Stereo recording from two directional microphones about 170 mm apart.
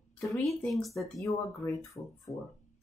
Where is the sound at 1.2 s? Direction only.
20° left (ahead or behind).